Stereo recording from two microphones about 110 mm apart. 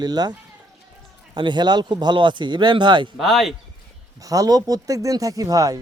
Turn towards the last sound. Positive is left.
turn(degrees=-35)  # may be behind; listen again after turning